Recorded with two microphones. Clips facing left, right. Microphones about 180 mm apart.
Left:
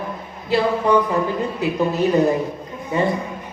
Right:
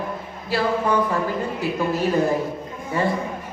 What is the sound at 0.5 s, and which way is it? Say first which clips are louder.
Speech: left 4 dB; 20° left (ahead or behind).